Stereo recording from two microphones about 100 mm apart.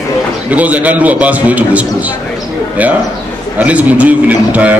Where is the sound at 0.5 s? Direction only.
15° right (ahead or behind).